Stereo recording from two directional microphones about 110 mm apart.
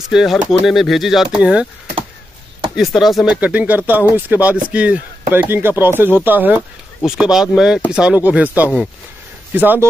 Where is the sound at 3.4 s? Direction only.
15° right (ahead or behind).